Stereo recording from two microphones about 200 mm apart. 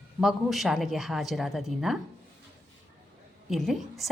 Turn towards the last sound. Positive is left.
turn(degrees=0)  # may be behind; listen again after turning